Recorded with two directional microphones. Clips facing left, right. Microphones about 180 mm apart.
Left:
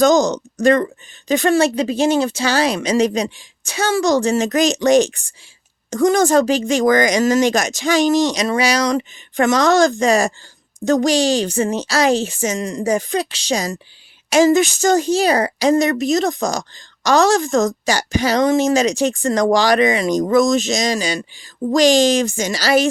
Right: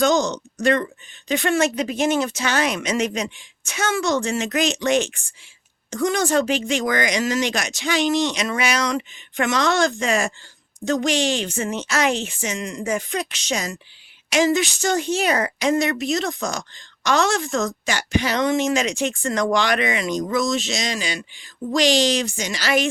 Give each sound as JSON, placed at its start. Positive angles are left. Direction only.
{"t": 0.0, "sound": "speech", "side_deg": 40}